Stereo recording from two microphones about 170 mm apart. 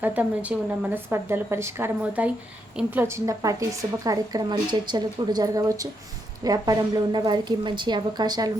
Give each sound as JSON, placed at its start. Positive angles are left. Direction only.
{"t": 0.0, "sound": "a woman's voice", "side_deg": -10}